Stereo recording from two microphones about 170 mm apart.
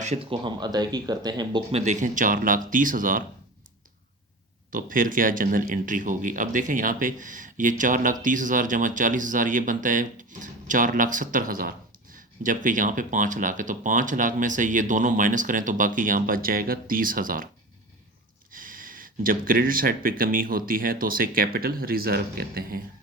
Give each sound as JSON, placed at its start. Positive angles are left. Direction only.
{"t": 0.0, "sound": "speech", "side_deg": -35}
{"t": 1.7, "sound": "speech", "side_deg": -45}
{"t": 4.7, "sound": "speech", "side_deg": -55}
{"t": 18.5, "sound": "speech", "side_deg": -55}